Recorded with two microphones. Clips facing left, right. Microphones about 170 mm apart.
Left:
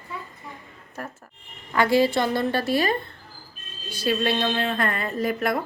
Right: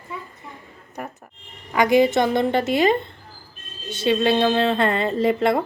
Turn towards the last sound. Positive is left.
turn(degrees=-25)  # may be behind; listen again after turning